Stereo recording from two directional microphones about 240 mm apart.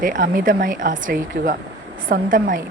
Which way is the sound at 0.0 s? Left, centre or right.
Right.